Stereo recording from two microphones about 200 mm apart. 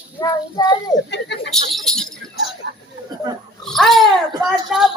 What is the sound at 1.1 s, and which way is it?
Speech, 60° left (ahead or behind).